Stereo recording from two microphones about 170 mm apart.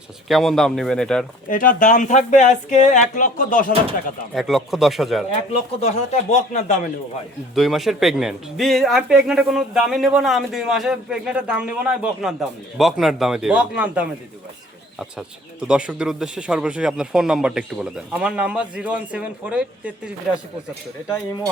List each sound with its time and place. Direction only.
0.3 s speech: centre (ahead or behind)
1.5 s speech: 50° left (ahead or behind)
4.4 s speech: centre (ahead or behind)
5.5 s speech: 40° left (ahead or behind)
7.5 s speech: centre (ahead or behind)
15.6 s speech: 5° right (ahead or behind)